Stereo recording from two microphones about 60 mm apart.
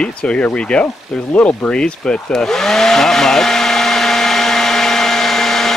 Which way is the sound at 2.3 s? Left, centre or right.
Centre.